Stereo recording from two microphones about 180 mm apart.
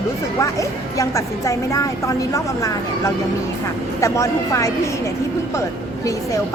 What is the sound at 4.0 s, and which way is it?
Speech, 15° left (ahead or behind).